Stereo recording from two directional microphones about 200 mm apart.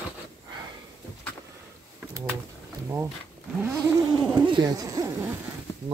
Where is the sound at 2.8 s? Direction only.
15° right (ahead or behind).